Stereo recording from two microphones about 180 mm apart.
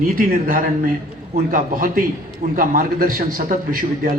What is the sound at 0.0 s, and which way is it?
Speech, 50° right (ahead or behind).